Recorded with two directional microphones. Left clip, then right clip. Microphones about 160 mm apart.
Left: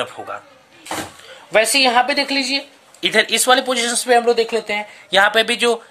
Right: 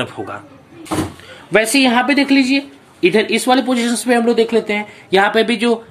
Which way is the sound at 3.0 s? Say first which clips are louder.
Right 2 dB; 60° left (ahead or behind).